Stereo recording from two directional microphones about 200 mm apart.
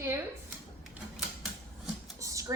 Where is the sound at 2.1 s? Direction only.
15° right (ahead or behind).